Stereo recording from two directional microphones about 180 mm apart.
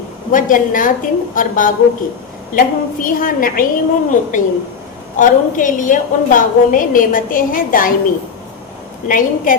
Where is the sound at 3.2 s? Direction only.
50° left (ahead or behind).